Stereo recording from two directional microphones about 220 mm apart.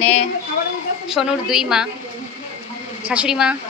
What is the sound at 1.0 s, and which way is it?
Speech, 5° right (ahead or behind).